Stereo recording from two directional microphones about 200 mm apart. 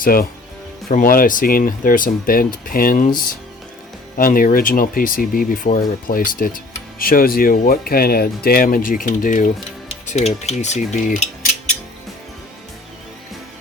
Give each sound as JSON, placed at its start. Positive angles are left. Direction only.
{"t": 0.0, "sound": "speech", "side_deg": 45}
{"t": 4.2, "sound": "speech", "side_deg": 45}
{"t": 10.1, "sound": "cutlery", "side_deg": 35}